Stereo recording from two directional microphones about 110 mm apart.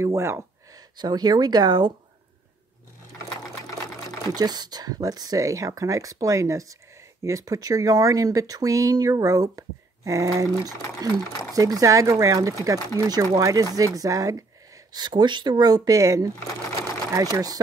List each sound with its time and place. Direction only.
0.0 s speech: 25° right (ahead or behind)
0.7 s speech: 40° right (ahead or behind)
4.3 s speech: 40° right (ahead or behind)